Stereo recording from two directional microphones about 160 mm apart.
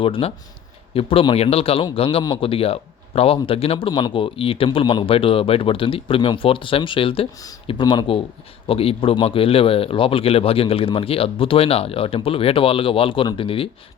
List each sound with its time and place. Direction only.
0.0 s a man's voice: 35° left (ahead or behind)